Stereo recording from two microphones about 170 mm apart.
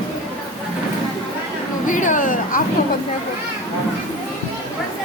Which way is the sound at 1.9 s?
50° left (ahead or behind).